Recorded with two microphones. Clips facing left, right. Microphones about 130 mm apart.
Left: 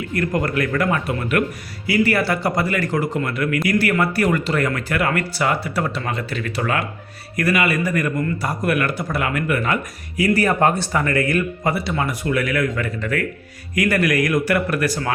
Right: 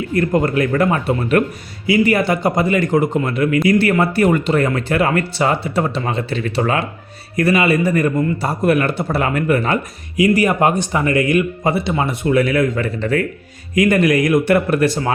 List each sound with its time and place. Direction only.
0.1 s a man's voice: 25° right (ahead or behind)
1.9 s a man's voice: 20° right (ahead or behind)
10.2 s a man's voice: 15° right (ahead or behind)